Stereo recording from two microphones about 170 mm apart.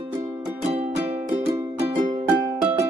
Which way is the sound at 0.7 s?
35° right (ahead or behind).